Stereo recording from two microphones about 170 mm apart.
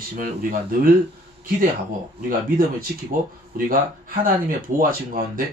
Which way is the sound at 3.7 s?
55° right (ahead or behind).